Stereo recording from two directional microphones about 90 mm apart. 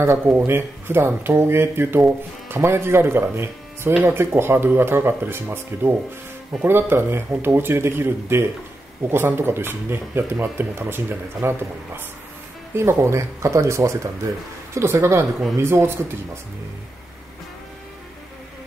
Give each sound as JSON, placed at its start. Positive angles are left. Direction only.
{"t": 0.5, "sound": "speech", "side_deg": -25}